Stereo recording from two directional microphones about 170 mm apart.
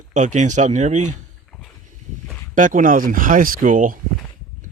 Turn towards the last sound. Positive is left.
turn(degrees=-50)  # may be behind; listen again after turning